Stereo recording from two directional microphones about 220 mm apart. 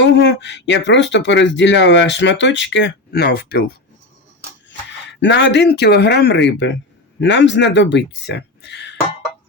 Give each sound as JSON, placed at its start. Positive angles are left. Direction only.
{"t": 0.0, "sound": "speech", "side_deg": 55}
{"t": 5.0, "sound": "speech", "side_deg": 55}